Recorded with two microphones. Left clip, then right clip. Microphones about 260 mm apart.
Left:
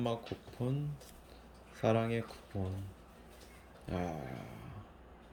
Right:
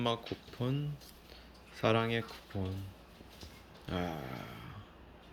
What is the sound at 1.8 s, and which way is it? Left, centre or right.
Speech, centre.